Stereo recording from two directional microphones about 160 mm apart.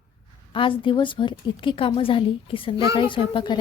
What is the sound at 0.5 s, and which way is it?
A woman's voice, 30° left (ahead or behind).